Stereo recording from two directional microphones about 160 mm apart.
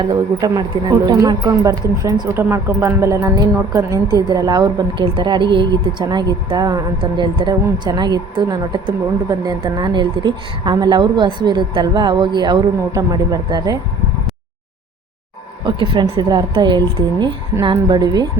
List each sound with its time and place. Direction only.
0.0 s a woman's voice: 25° right (ahead or behind)
15.6 s a woman's voice: 30° right (ahead or behind)